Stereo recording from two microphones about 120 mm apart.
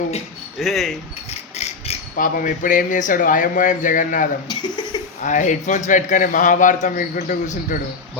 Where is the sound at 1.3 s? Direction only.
65° left (ahead or behind); by 4.3 s 90° left.